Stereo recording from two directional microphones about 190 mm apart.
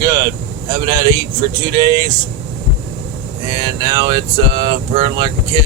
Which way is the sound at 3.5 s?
20° right (ahead or behind).